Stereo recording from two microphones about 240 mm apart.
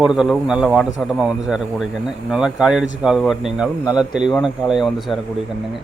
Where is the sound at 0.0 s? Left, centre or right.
Centre.